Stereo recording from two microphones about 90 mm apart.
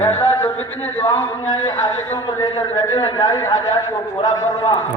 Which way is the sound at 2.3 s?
50° left (ahead or behind).